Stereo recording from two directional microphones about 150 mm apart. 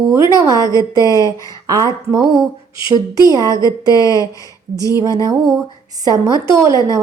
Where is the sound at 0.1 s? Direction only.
20° right (ahead or behind).